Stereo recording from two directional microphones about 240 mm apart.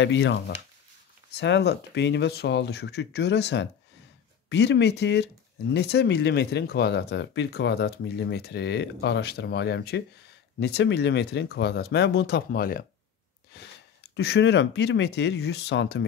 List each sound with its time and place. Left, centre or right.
0.0 s speech: left
14.1 s speech: left